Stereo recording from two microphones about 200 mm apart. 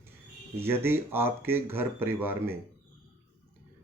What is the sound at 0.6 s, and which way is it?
Speech, 10° right (ahead or behind).